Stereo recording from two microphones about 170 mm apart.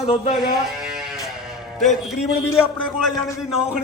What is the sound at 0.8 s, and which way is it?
Sheep, 5° right (ahead or behind).